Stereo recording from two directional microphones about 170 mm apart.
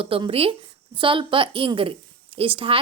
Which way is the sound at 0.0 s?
35° right (ahead or behind).